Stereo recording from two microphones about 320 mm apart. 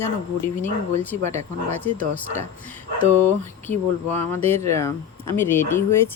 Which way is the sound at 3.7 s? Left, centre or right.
Centre.